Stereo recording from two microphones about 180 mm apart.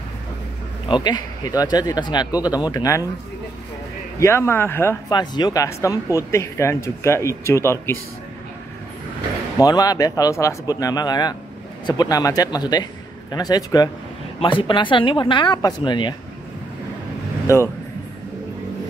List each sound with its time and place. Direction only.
0.8 s speech: 25° left (ahead or behind)
4.2 s speech: 15° left (ahead or behind)
9.6 s speech: 20° left (ahead or behind)
17.5 s speech: 15° left (ahead or behind)